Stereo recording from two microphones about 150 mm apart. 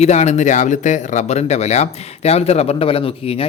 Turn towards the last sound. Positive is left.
turn(degrees=40)  # may be behind; listen again after turning